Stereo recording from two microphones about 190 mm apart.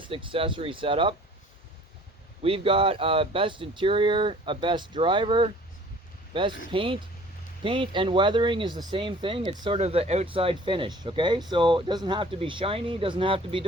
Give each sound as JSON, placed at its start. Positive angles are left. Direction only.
{"t": 0.1, "sound": "speech", "side_deg": -25}
{"t": 2.4, "sound": "speech", "side_deg": -30}